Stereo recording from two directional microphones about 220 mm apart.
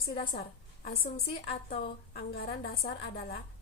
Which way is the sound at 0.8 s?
45° left (ahead or behind).